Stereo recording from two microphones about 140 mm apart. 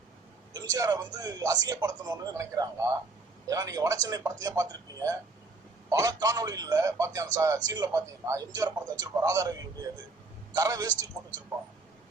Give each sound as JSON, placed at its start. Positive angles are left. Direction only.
{"t": 0.5, "sound": "a man's voice", "side_deg": -25}